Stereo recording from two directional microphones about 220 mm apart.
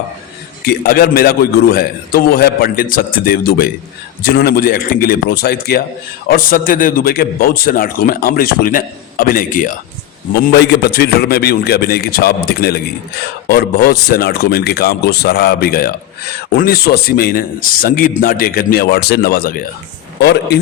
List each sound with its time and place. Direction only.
0.6 s a man's voice: 45° left (ahead or behind)
10.5 s a man's voice: 50° left (ahead or behind)